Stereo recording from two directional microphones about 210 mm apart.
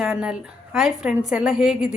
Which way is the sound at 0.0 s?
5° right (ahead or behind).